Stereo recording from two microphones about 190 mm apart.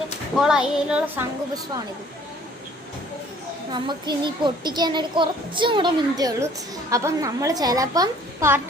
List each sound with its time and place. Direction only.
0.3 s speech: 5° right (ahead or behind)
3.7 s a child's voice: 25° right (ahead or behind)